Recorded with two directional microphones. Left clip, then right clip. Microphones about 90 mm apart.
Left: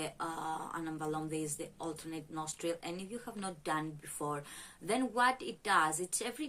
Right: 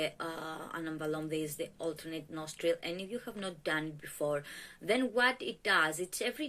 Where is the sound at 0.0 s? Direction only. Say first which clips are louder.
Right 2 dB; 35° left (ahead or behind).